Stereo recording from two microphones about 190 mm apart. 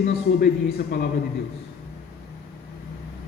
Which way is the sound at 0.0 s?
50° left (ahead or behind).